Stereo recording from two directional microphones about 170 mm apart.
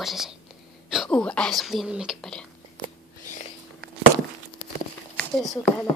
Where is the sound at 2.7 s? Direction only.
50° left (ahead or behind).